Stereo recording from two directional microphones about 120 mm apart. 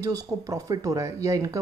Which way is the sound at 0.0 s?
30° right (ahead or behind).